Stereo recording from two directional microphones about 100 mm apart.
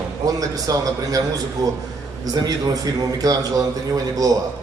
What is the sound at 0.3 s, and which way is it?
Speech, 35° right (ahead or behind).